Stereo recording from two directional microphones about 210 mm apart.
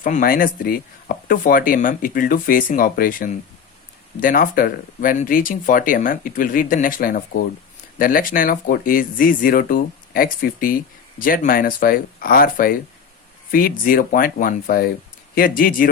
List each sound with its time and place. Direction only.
0.0 s speech: 40° left (ahead or behind)